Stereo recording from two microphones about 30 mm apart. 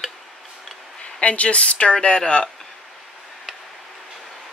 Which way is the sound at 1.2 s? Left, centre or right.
Left.